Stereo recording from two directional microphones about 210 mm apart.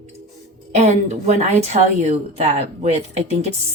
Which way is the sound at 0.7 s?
30° right (ahead or behind).